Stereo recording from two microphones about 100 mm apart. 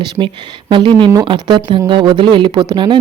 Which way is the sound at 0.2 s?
35° right (ahead or behind).